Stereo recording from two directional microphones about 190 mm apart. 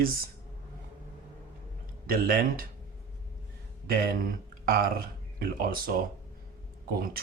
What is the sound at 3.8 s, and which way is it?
Speech, 50° right (ahead or behind).